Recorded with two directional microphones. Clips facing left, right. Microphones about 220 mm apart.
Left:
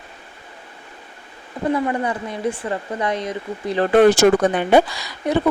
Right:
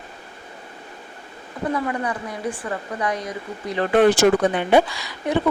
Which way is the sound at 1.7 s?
25° left (ahead or behind).